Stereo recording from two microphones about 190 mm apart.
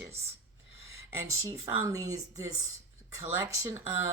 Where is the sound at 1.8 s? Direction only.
15° right (ahead or behind).